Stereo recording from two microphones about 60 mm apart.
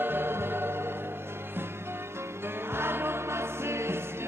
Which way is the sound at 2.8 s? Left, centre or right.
Right.